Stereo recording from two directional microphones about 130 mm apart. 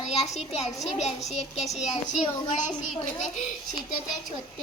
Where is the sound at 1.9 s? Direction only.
60° left (ahead or behind).